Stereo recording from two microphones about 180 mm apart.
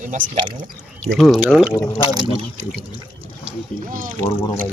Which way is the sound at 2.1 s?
25° right (ahead or behind).